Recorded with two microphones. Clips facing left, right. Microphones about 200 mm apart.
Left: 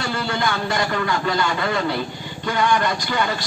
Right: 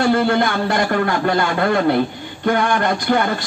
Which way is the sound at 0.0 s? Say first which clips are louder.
Right 8 dB; 55° right (ahead or behind).